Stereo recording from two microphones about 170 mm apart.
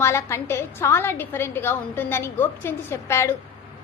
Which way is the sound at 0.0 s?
15° left (ahead or behind).